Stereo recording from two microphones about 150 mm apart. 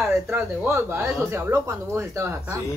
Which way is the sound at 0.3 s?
15° right (ahead or behind).